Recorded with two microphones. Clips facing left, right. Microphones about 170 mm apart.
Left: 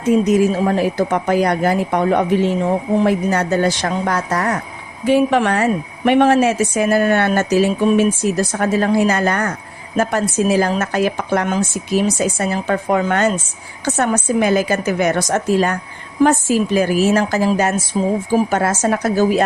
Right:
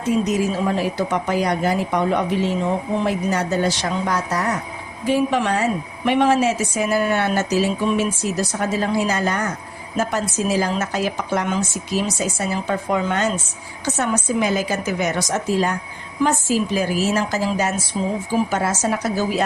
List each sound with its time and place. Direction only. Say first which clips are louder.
0.3 s speech: left 6 dB; 50° left (ahead or behind)
18.0 s speech: left 5 dB; 40° left (ahead or behind)
18.5 s speech: left 4 dB; 55° left (ahead or behind)